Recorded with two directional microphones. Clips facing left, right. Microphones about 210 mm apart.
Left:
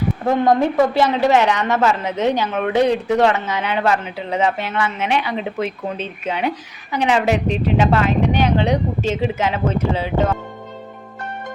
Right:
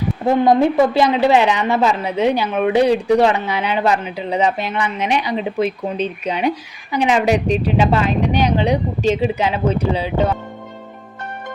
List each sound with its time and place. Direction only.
0.3 s a woman's voice: 10° right (ahead or behind)